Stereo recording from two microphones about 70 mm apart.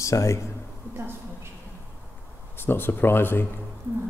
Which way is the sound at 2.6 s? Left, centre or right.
Left.